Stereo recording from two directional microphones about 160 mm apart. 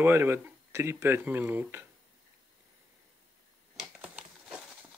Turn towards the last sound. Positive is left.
turn(degrees=-5)  # may be behind; listen again after turning